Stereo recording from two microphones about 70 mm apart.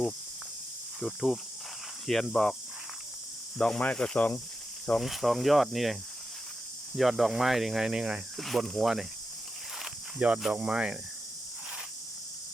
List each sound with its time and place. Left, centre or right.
0.9 s snake: centre
3.6 s speech: centre
4.9 s snake: centre
8.4 s snake: centre
10.2 s speech: centre